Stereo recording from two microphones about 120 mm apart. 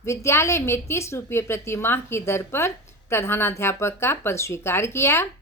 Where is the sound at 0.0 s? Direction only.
25° left (ahead or behind).